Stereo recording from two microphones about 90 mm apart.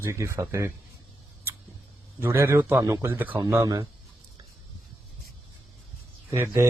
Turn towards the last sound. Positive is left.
turn(degrees=-30)  # may be behind; listen again after turning